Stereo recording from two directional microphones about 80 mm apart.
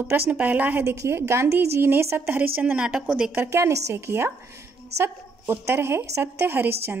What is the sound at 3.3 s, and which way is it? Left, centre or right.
A woman's voice, right.